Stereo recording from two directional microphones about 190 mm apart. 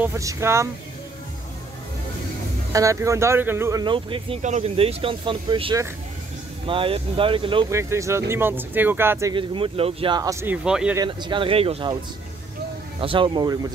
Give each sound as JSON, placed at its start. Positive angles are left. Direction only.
{"t": 0.0, "sound": "speech", "side_deg": -15}
{"t": 2.7, "sound": "speech", "side_deg": -15}
{"t": 7.7, "sound": "speech", "side_deg": -15}
{"t": 9.3, "sound": "speech", "side_deg": -25}
{"t": 11.0, "sound": "speech", "side_deg": -25}
{"t": 13.0, "sound": "speech", "side_deg": -25}